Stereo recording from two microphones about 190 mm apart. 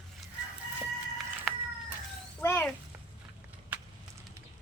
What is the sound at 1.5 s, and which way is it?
Cat, centre (ahead or behind).